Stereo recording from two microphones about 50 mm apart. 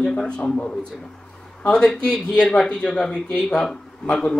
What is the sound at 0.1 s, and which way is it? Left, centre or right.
A man's voice, left.